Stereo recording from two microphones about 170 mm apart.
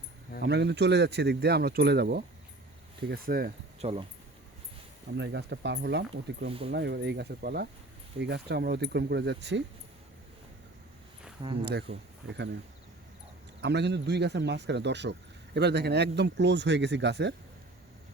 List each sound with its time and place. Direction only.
0.4 s speech: 90° right; by 2.2 s 75° right (ahead or behind)
3.1 s speech: 60° right (ahead or behind)
3.8 s speech: 35° right (ahead or behind)
5.1 s speech: 90° right
11.6 s speech: 75° right (ahead or behind)
13.6 s speech: 80° right
15.5 s speech: 80° right